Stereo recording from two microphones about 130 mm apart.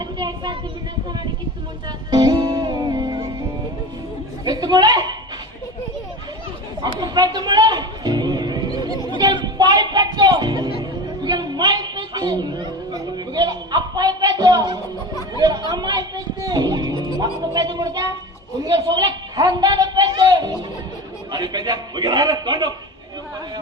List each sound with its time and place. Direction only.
0.0 s a sound: 35° right (ahead or behind)
2.0 s music: 35° right (ahead or behind)
4.4 s speech: 30° right (ahead or behind)
7.0 s music: 30° right (ahead or behind)
11.2 s a woman's voice: 30° right (ahead or behind)